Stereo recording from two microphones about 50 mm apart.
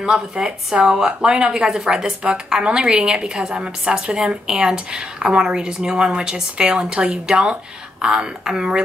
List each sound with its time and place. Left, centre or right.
0.0 s speech: centre